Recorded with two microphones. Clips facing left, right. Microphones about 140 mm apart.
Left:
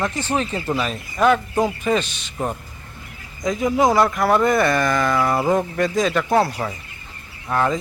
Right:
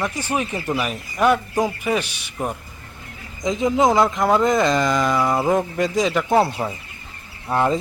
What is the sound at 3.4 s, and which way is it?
Speech, 20° right (ahead or behind).